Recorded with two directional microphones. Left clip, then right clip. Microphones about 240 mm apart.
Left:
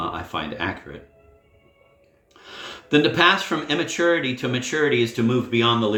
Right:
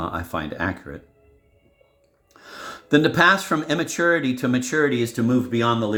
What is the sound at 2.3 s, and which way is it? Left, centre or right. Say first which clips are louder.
Speech: even; right.